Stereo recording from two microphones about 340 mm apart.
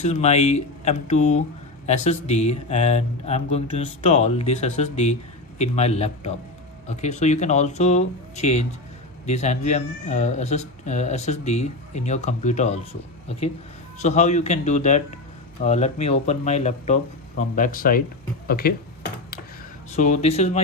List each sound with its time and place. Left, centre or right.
0.0 s speech: centre
18.4 s a sound: left
19.9 s speech: centre